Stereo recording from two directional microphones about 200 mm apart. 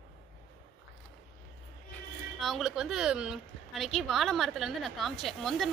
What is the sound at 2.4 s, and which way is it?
Speech, centre (ahead or behind).